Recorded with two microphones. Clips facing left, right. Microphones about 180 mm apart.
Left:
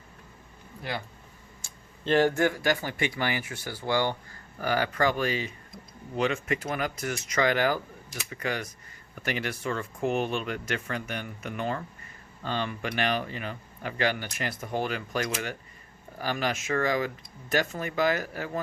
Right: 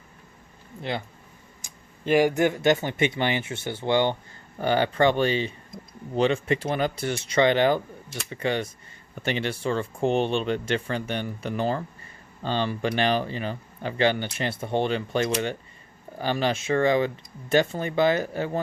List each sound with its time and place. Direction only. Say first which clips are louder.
0.8 s speech: right 4 dB; 25° right (ahead or behind)
1.6 s speech: right 3 dB; 10° right (ahead or behind); by 18.6 s 25° right (ahead or behind)